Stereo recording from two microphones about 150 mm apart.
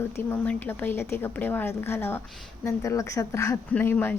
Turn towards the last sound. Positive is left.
turn(degrees=10)  # may be behind; listen again after turning